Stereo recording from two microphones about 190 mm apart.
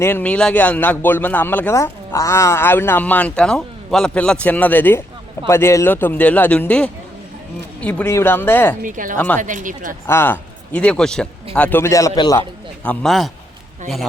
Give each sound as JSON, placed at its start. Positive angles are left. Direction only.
{"t": 0.0, "sound": "a man's voice", "side_deg": 10}
{"t": 8.8, "sound": "speech", "side_deg": -45}
{"t": 9.1, "sound": "a man's voice", "side_deg": 10}
{"t": 9.4, "sound": "speech", "side_deg": -45}
{"t": 10.1, "sound": "a man's voice", "side_deg": 10}
{"t": 12.4, "sound": "a man's voice", "side_deg": 5}